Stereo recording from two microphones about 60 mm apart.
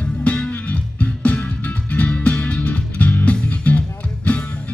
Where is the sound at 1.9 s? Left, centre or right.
Left.